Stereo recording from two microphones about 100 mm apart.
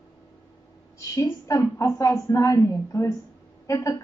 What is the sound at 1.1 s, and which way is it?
A woman's voice, 30° left (ahead or behind).